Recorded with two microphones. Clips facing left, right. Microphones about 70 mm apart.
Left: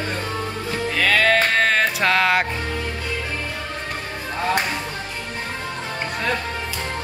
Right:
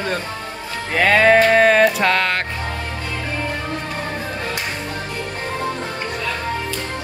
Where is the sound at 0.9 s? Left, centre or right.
Right.